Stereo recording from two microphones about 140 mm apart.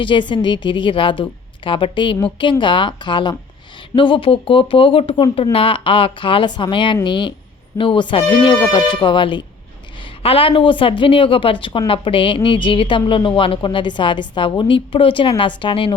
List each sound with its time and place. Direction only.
0.0 s a woman's voice: 35° left (ahead or behind)